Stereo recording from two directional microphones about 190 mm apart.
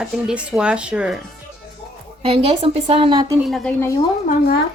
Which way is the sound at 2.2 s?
30° right (ahead or behind).